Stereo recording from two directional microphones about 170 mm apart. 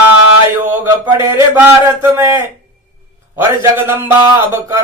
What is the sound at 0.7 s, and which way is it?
A man's voice, 15° right (ahead or behind).